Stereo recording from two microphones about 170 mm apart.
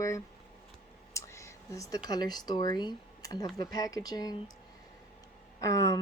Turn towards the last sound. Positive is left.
turn(degrees=20)  # may be behind; listen again after turning